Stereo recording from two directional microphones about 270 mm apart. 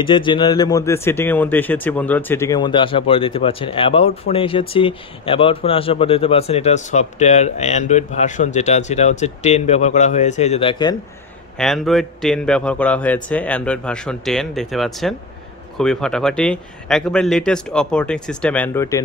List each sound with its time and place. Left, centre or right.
0.0 s speech: centre
11.5 s a man's voice: centre